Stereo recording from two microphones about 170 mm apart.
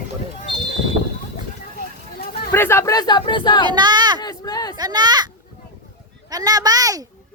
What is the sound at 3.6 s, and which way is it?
Speech, 25° right (ahead or behind).